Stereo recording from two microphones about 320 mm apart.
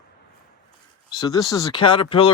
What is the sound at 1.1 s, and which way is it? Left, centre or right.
Speech, centre.